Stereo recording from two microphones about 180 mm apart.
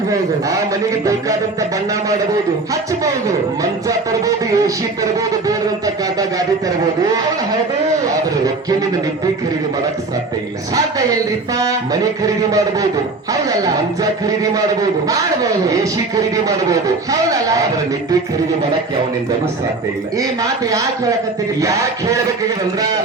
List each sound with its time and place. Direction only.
3.0 s a man's voice: 20° right (ahead or behind)
11.1 s a man's voice: 20° right (ahead or behind)
20.1 s a man's voice: 20° right (ahead or behind)